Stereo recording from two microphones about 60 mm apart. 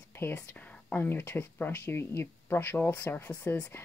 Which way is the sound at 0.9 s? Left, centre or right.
Left.